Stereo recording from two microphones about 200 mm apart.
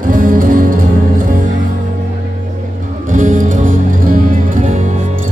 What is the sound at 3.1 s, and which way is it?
Music, 40° right (ahead or behind).